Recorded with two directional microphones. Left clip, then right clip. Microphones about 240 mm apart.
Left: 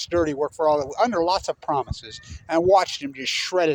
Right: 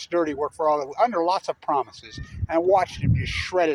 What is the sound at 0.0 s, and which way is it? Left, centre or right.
Speech, centre.